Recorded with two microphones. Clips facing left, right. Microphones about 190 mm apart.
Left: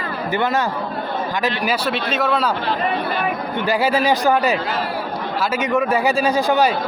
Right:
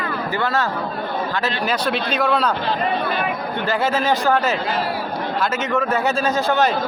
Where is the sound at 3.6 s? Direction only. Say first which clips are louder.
Left 2 dB; 10° left (ahead or behind).